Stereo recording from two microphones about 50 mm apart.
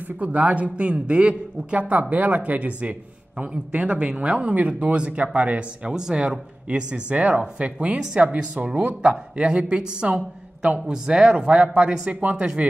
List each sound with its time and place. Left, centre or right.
0.2 s a man's voice: right
12.1 s speech: right